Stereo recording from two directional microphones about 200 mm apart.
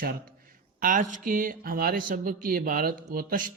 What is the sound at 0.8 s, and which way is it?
Speech, 45° right (ahead or behind).